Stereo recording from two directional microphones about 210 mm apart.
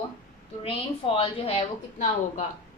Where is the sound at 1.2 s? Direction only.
25° left (ahead or behind).